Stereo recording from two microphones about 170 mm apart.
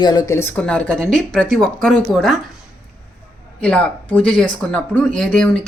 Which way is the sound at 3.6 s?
5° left (ahead or behind).